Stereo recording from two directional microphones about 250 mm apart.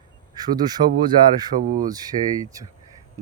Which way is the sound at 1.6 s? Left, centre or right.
Right.